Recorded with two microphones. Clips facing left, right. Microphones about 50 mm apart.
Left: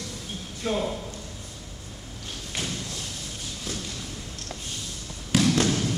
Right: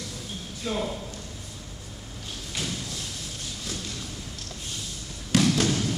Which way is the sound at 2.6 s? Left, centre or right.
Centre.